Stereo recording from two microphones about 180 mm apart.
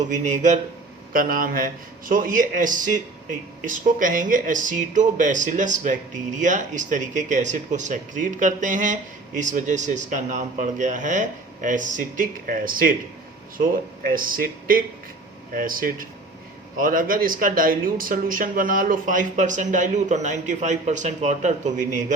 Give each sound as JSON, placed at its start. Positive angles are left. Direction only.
{"t": 0.0, "sound": "speech", "side_deg": -45}
{"t": 14.1, "sound": "speech", "side_deg": -50}